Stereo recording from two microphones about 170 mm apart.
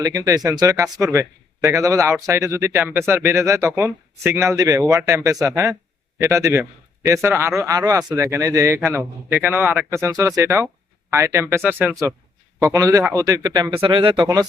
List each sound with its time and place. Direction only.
0.0 s a man's voice: 20° right (ahead or behind)